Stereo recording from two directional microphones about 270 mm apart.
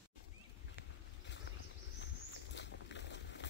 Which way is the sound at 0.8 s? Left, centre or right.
Left.